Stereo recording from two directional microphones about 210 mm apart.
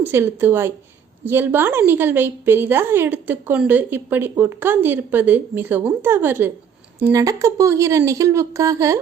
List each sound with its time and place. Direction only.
0.0 s a woman's voice: 10° right (ahead or behind)